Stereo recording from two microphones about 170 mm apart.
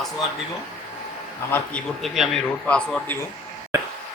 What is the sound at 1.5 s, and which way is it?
Speech, 10° left (ahead or behind).